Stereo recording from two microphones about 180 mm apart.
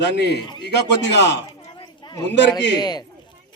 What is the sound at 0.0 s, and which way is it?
A man's voice, 70° left (ahead or behind).